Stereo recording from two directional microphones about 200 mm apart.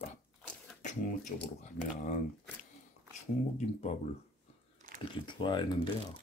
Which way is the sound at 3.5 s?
35° left (ahead or behind).